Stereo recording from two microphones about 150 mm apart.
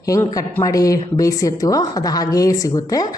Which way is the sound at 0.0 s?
20° left (ahead or behind).